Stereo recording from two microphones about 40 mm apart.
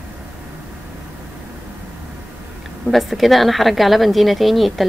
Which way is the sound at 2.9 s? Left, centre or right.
Centre.